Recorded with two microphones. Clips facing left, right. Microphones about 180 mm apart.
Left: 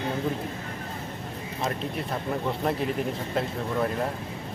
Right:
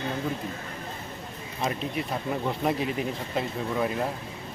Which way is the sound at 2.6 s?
5° right (ahead or behind).